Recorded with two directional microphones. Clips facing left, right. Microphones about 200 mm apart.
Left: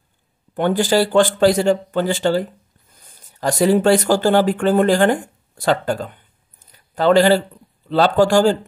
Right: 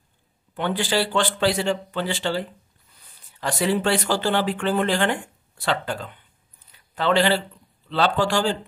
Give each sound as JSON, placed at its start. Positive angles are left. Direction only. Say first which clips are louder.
{"t": 0.6, "sound": "speech", "louder": "left 7 dB", "side_deg": 45}